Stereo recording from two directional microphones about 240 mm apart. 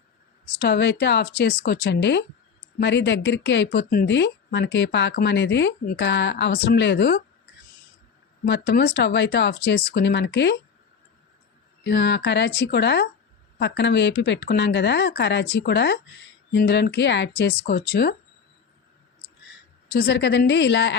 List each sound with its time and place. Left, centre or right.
0.6 s speech: left
8.4 s speech: left
11.8 s speech: left
19.9 s speech: left